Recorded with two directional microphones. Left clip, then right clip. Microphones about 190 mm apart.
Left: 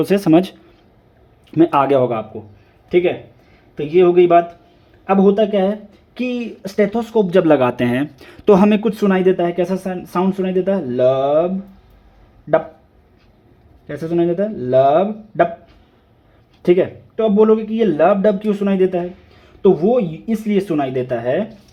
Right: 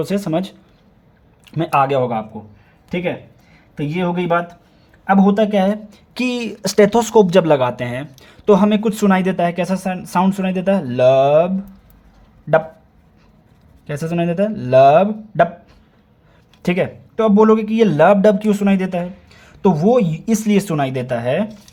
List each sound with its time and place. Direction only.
0.0 s speech: 5° left (ahead or behind)
1.5 s speech: 5° left (ahead or behind)
3.8 s speech: 10° left (ahead or behind)
5.2 s speech: 5° right (ahead or behind)
6.1 s speech: 35° right (ahead or behind)
7.3 s speech: 20° right (ahead or behind)
7.5 s speech: centre (ahead or behind)
13.8 s speech: 15° right (ahead or behind)
16.6 s speech: 10° right (ahead or behind)
17.2 s speech: 20° right (ahead or behind)
19.9 s speech: 35° right (ahead or behind)
20.8 s speech: 10° right (ahead or behind)